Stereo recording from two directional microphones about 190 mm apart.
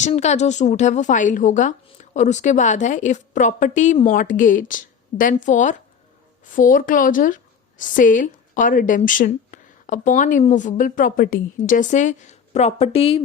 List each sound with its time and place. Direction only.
0.0 s a woman's voice: 35° left (ahead or behind)